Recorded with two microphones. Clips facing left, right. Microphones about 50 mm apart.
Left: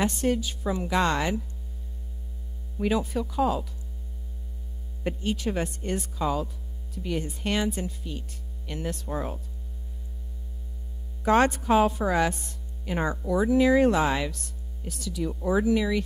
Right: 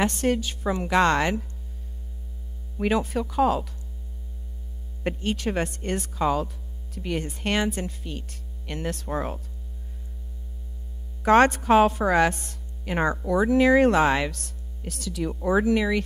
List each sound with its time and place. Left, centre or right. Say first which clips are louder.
0.0 s speech: right 2 dB; right
2.8 s speech: right 2 dB; right
5.0 s speech: right 2 dB; right
11.2 s speech: right 4 dB; right